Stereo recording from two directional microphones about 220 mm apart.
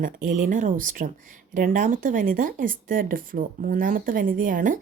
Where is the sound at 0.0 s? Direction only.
40° right (ahead or behind).